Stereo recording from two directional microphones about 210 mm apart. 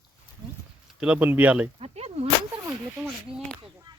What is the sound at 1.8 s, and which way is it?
Whip, 30° right (ahead or behind).